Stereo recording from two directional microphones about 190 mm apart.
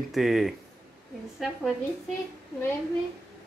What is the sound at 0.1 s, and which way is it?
Speech, centre (ahead or behind).